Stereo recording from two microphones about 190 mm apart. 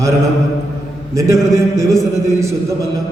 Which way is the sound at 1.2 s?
15° right (ahead or behind).